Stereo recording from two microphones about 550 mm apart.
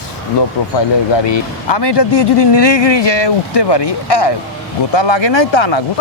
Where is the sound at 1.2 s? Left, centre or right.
Left.